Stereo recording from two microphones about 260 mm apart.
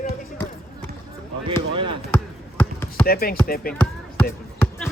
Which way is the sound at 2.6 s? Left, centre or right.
Centre.